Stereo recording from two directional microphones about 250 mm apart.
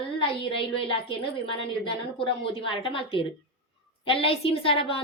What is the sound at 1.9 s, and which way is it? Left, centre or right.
A woman's voice, left.